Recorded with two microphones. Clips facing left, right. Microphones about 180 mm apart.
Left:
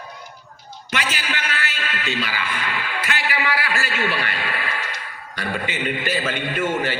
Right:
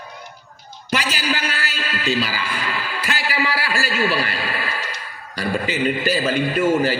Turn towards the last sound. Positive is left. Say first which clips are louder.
# right 5 dB
turn(degrees=-35)  # may be behind; listen again after turning